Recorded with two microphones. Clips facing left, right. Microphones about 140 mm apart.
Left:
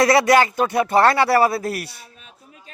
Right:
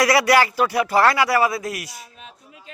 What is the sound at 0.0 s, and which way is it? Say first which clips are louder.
Speech: left 2 dB; 25° left (ahead or behind).